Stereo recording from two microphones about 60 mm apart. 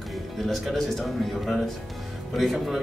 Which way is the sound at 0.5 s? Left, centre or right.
Centre.